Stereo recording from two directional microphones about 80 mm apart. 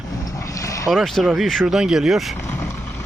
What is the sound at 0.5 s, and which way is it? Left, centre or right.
Boat, left.